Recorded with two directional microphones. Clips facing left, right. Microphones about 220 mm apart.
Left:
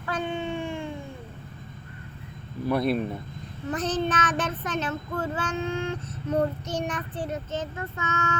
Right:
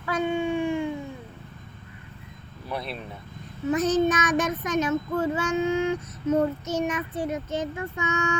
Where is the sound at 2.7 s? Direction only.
45° left (ahead or behind).